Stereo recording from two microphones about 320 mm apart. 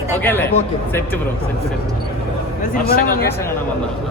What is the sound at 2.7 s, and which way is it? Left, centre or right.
Speech, left.